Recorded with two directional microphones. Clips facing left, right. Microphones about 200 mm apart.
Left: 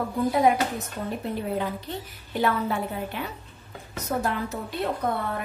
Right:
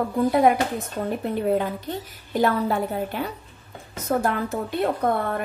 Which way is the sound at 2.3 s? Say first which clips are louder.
Right 4 dB; 40° right (ahead or behind).